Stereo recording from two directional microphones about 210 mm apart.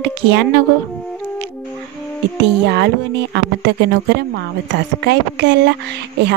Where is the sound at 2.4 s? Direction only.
55° right (ahead or behind).